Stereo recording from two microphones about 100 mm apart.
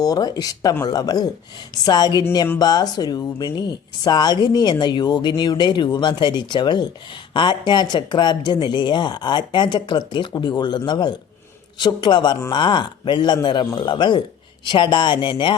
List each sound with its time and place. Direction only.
0.0 s speech: 40° left (ahead or behind)